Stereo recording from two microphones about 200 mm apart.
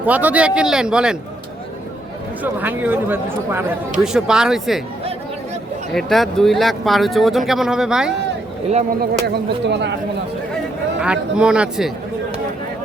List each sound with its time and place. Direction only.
0.0 s speech: 10° right (ahead or behind)
2.4 s speech: 10° right (ahead or behind)
5.9 s speech: centre (ahead or behind)
9.0 s speech: 55° right (ahead or behind)
11.0 s speech: 5° right (ahead or behind)